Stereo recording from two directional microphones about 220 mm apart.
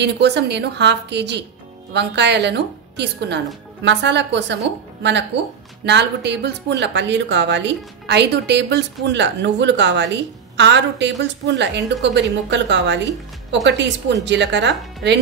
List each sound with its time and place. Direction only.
0.0 s a woman's voice: 50° right (ahead or behind)